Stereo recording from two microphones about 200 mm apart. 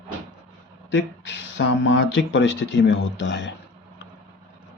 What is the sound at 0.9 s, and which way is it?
Speech, 65° left (ahead or behind).